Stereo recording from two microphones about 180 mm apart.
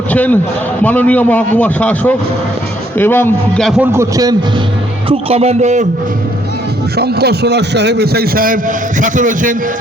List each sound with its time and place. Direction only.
0.1 s a man's voice: 10° left (ahead or behind)
3.8 s a man's voice: 15° right (ahead or behind)
5.0 s a man's voice: 35° right (ahead or behind)
6.9 s a man's voice: 65° right (ahead or behind)
9.0 s a man's voice: 45° right (ahead or behind)